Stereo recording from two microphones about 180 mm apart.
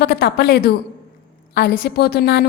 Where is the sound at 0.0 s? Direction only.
60° left (ahead or behind).